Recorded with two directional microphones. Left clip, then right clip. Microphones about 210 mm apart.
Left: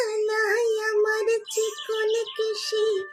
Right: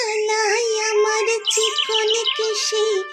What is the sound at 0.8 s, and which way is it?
Child singing, 45° right (ahead or behind).